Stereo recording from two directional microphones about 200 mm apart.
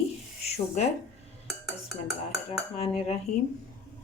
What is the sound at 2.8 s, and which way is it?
Speech, 30° left (ahead or behind).